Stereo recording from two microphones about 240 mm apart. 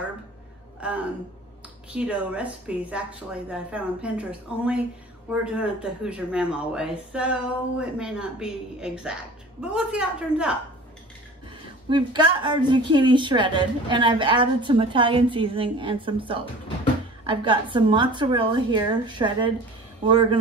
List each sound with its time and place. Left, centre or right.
0.7 s speech: centre
11.9 s a woman's voice: centre